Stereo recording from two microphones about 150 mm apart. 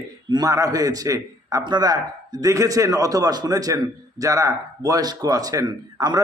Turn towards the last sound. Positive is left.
turn(degrees=-25)  # may be behind; listen again after turning